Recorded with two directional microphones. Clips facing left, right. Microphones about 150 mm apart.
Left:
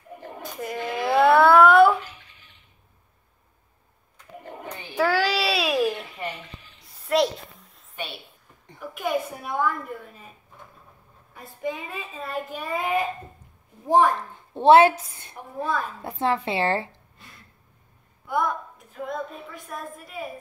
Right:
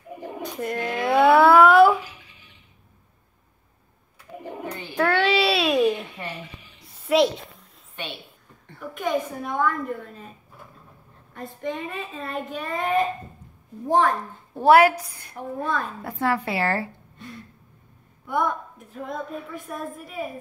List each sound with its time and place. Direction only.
0.4 s a sound: centre (ahead or behind)
4.4 s bird: 10° right (ahead or behind)
4.9 s baby cry: 5° left (ahead or behind)
6.8 s a sound: centre (ahead or behind)
8.6 s a woman's voice: 10° left (ahead or behind)
11.3 s a woman's voice: 5° left (ahead or behind)
14.6 s speech: 25° left (ahead or behind)
18.2 s a woman's voice: centre (ahead or behind)